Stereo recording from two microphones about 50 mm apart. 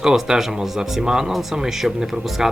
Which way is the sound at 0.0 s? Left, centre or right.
Centre.